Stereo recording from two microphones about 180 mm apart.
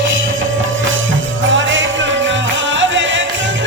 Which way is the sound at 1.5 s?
90° right.